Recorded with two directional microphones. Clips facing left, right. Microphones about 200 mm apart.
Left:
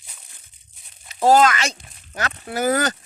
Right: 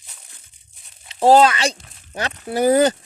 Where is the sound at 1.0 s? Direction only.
30° right (ahead or behind).